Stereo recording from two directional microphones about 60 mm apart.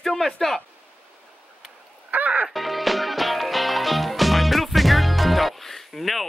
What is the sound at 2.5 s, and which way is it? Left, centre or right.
Music, centre.